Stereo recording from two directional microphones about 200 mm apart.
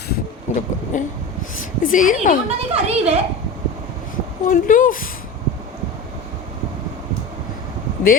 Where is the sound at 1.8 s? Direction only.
40° left (ahead or behind).